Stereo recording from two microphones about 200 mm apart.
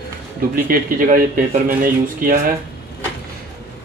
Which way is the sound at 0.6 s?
45° right (ahead or behind).